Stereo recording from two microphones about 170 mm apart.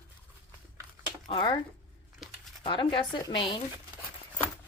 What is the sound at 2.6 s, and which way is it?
Speech, 30° left (ahead or behind).